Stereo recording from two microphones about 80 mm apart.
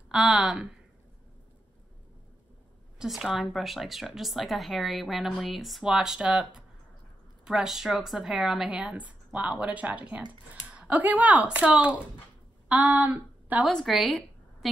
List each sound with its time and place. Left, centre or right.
0.1 s speech: centre
3.0 s a woman's voice: centre
13.7 s a woman's voice: centre